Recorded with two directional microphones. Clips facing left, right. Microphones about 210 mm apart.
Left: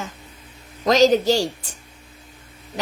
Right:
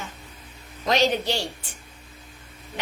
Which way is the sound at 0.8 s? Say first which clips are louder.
Left 7 dB; 40° left (ahead or behind).